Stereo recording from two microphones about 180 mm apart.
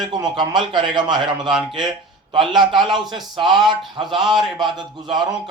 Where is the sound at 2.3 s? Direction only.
25° right (ahead or behind).